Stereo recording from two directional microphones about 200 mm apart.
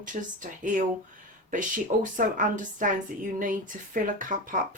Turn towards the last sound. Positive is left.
turn(degrees=-40)  # may be behind; listen again after turning